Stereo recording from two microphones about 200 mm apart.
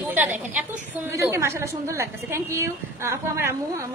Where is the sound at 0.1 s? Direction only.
10° right (ahead or behind).